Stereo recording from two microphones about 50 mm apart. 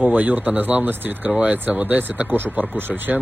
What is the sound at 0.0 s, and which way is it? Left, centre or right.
Speech, right.